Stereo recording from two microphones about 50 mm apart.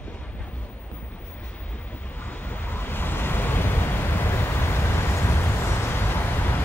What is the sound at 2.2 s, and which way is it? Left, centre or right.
Vehicle, left.